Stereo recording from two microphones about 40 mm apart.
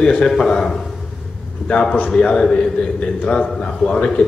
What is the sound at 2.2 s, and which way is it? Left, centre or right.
Speech, left.